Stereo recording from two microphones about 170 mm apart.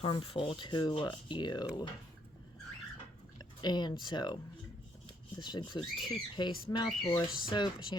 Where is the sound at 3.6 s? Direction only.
25° left (ahead or behind).